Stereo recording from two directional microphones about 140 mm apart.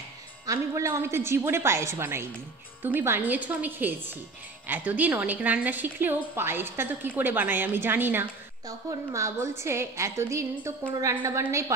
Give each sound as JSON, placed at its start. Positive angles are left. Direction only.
{"t": 0.5, "sound": "a woman's voice", "side_deg": -25}